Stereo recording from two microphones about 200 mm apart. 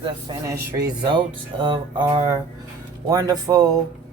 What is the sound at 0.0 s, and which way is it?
Speech, 20° right (ahead or behind).